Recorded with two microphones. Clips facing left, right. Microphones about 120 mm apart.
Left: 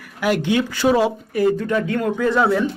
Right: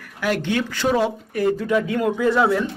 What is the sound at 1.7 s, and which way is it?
Speech, 10° right (ahead or behind).